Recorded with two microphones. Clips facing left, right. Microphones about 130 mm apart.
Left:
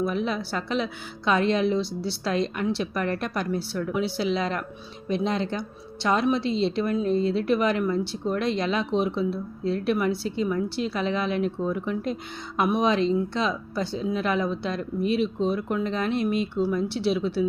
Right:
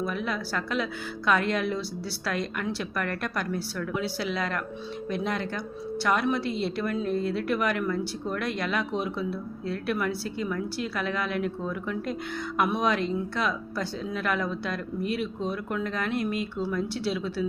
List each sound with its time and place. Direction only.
0.0 s speech: 20° left (ahead or behind)